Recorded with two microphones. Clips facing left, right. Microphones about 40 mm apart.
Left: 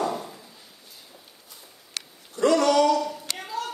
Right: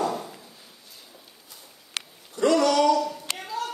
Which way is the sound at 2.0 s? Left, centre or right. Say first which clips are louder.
Right 3 dB; right.